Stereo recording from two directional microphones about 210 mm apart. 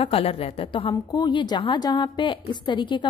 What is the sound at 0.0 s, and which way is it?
A woman's voice, 25° left (ahead or behind).